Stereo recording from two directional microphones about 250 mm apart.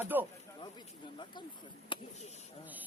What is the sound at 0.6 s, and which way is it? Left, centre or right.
Speech, centre.